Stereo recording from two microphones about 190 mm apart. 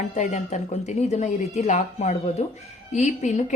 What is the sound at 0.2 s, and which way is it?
Speech, 40° left (ahead or behind).